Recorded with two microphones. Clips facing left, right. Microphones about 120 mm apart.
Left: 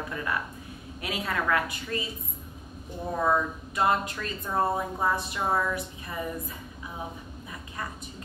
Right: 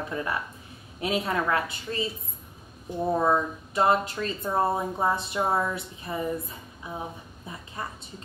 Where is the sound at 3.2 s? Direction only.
20° right (ahead or behind).